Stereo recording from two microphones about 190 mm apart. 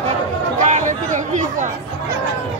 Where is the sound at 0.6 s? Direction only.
40° right (ahead or behind).